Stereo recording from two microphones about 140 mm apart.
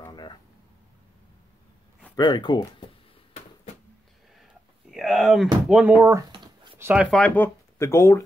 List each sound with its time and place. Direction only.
2.1 s speech: 30° left (ahead or behind)
4.9 s speech: centre (ahead or behind)
6.1 s a sound: 35° right (ahead or behind)
6.8 s speech: 10° right (ahead or behind)
7.1 s speech: 5° left (ahead or behind)